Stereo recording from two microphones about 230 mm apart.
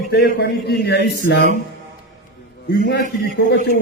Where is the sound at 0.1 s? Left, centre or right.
Left.